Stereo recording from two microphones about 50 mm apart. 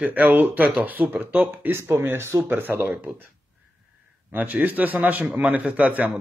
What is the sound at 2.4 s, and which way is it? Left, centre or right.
Speech, right.